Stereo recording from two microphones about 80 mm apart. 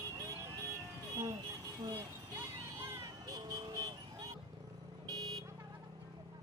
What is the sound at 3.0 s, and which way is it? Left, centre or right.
Vehicle, right.